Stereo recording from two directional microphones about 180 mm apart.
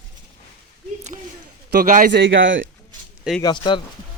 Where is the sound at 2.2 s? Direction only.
90° right.